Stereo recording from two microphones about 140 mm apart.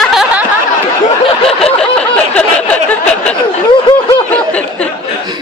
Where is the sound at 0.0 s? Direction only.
Centre (ahead or behind).